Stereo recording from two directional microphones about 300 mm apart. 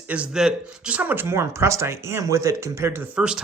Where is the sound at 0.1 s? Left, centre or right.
Centre.